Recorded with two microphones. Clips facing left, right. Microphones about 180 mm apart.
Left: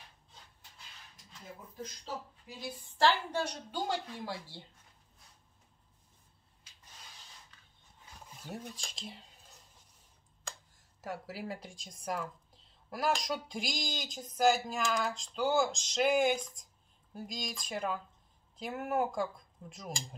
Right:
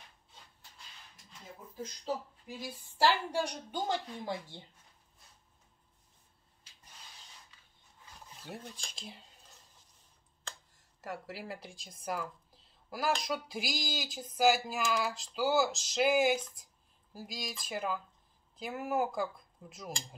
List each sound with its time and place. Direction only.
3.0 s a woman's voice: 10° right (ahead or behind)
8.4 s speech: centre (ahead or behind)
11.0 s speech: centre (ahead or behind)